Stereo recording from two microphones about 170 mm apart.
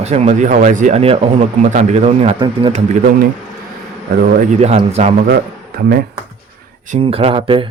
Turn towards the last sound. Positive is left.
turn(degrees=-30)  # may be behind; listen again after turning